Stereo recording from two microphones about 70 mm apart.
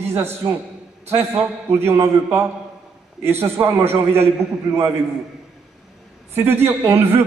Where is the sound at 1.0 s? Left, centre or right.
Right.